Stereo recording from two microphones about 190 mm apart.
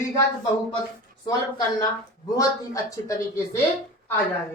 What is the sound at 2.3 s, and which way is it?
Speech, 20° left (ahead or behind).